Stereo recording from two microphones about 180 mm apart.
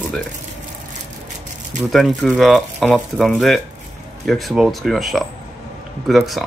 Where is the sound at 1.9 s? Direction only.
Centre (ahead or behind).